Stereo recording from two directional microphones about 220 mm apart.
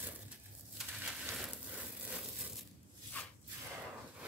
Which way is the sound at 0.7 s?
5° right (ahead or behind).